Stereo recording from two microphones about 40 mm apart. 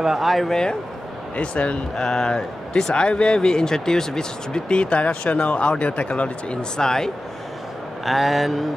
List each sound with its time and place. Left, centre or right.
0.0 s speech: centre
0.5 s speech: centre
1.3 s speech: left
2.0 s speech: centre; by 6.6 s left
6.8 s speech: centre
8.0 s speech: centre